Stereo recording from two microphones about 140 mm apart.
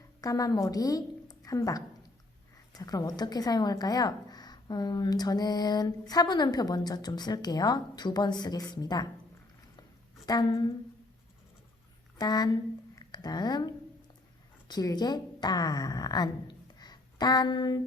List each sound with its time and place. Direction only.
0.2 s a woman's voice: 25° left (ahead or behind)
10.2 s a woman's voice: 30° left (ahead or behind)
12.1 s a woman's voice: 25° left (ahead or behind)